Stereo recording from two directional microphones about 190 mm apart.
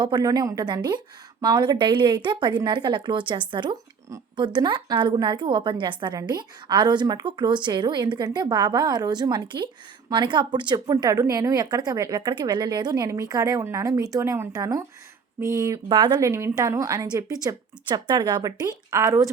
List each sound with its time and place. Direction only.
0.0 s a woman's voice: 20° right (ahead or behind)